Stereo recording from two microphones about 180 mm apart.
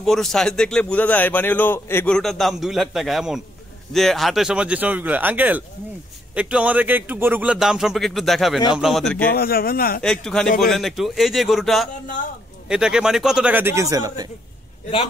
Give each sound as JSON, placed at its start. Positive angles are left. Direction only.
{"t": 0.0, "sound": "a man's voice", "side_deg": 0}
{"t": 9.3, "sound": "a man's voice", "side_deg": 55}
{"t": 10.0, "sound": "a man's voice", "side_deg": 5}